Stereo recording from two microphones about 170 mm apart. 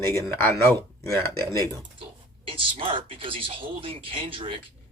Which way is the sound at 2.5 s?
30° right (ahead or behind).